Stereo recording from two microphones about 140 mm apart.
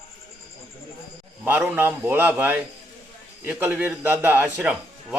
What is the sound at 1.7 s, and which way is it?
A man's voice, 15° right (ahead or behind).